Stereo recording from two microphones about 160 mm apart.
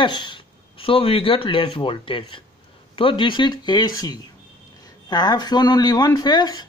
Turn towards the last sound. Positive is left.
turn(degrees=25)  # may be behind; listen again after turning